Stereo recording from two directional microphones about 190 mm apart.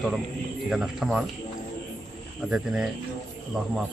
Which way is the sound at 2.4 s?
5° right (ahead or behind).